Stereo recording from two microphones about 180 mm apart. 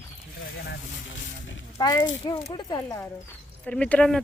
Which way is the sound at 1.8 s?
25° left (ahead or behind).